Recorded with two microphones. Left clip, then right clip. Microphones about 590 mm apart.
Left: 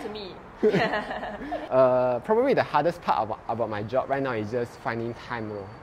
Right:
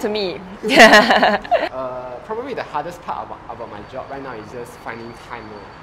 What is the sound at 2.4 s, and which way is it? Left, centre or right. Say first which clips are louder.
Speech: left 3 dB; left.